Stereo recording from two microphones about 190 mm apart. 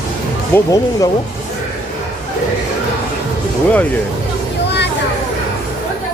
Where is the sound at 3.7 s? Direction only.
10° left (ahead or behind).